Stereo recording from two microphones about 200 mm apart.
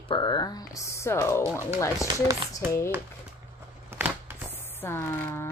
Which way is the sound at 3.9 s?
10° right (ahead or behind).